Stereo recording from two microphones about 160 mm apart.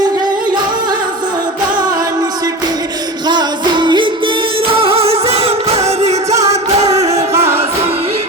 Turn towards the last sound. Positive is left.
turn(degrees=-40)  # may be behind; listen again after turning